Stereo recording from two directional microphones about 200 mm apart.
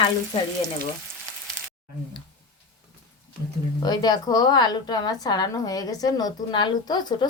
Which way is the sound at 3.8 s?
20° left (ahead or behind).